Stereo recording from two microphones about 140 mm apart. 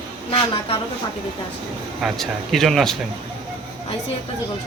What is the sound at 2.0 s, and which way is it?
Speech, centre (ahead or behind).